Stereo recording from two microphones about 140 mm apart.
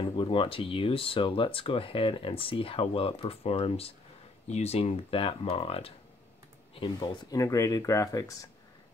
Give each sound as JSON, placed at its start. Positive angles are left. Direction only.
{"t": 0.0, "sound": "speech", "side_deg": 35}